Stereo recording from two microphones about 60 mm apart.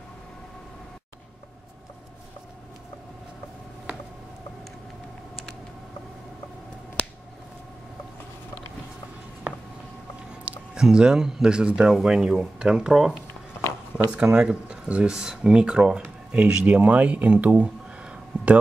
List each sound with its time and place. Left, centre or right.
10.4 s speech: centre
14.1 s speech: centre